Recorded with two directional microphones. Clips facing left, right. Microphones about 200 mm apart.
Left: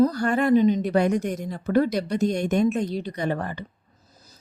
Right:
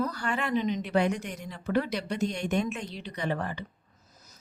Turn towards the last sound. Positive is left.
turn(degrees=45)  # may be behind; listen again after turning